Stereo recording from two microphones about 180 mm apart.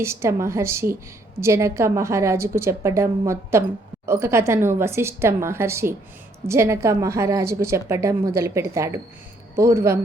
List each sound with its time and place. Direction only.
0.0 s a woman's voice: 15° right (ahead or behind)